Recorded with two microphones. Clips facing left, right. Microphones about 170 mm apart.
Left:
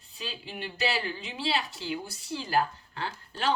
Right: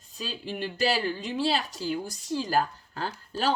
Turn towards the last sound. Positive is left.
turn(degrees=-40)  # may be behind; listen again after turning